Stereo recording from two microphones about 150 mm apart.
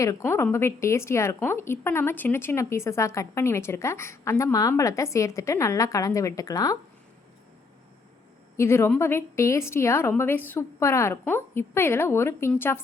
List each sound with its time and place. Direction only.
0.0 s speech: 20° left (ahead or behind)
8.5 s a woman's voice: 15° left (ahead or behind)